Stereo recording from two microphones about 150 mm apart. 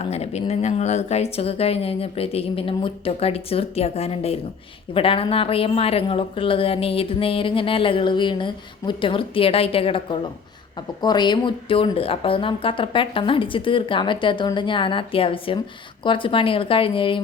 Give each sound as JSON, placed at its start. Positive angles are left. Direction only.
{"t": 0.0, "sound": "a woman's voice", "side_deg": 45}